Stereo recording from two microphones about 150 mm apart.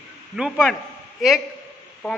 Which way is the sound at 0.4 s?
5° right (ahead or behind).